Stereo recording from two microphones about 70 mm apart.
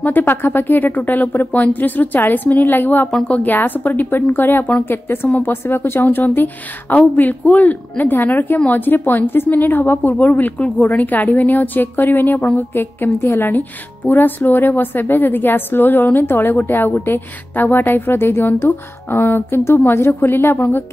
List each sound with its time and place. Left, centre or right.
0.0 s a woman's voice: left